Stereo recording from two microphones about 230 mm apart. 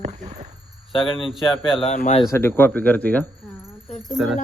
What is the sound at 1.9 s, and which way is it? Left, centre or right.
Speech, left.